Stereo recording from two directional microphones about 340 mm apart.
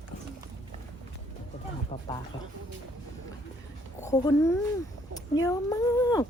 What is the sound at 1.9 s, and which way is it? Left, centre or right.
Speech, centre.